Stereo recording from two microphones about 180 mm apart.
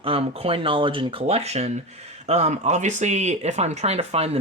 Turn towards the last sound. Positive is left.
turn(degrees=-35)  # may be behind; listen again after turning